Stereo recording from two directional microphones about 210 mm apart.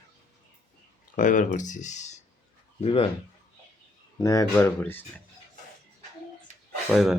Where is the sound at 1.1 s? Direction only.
40° left (ahead or behind).